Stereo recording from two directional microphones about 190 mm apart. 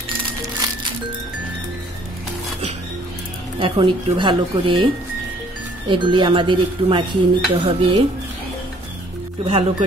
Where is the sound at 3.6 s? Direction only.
25° right (ahead or behind).